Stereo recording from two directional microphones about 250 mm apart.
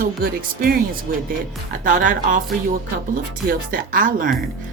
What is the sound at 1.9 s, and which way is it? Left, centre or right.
A woman's voice, right.